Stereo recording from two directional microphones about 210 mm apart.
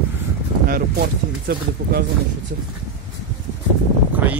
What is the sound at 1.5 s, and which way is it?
Speech, 50° right (ahead or behind).